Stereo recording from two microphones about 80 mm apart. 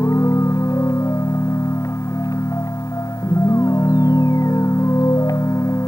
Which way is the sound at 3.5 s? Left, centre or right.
Left.